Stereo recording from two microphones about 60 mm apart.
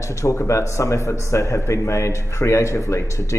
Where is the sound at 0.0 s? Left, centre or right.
Left.